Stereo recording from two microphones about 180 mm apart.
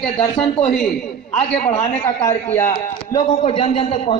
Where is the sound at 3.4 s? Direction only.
30° left (ahead or behind).